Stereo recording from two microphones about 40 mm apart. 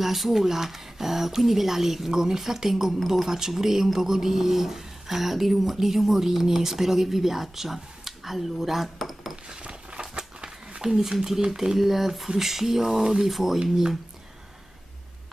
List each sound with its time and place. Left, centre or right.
0.0 s speech: centre
9.6 s a sound: right
11.4 s speech: centre
11.8 s speech: centre